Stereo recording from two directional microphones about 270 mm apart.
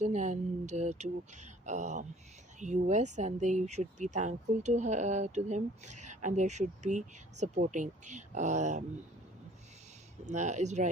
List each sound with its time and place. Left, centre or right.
0.0 s speech: right
10.2 s speech: right